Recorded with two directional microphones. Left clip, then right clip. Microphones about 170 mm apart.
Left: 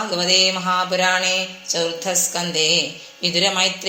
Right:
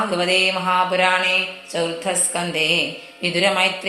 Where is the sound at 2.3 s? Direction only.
25° left (ahead or behind).